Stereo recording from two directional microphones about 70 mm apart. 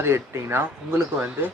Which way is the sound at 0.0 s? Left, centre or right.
Right.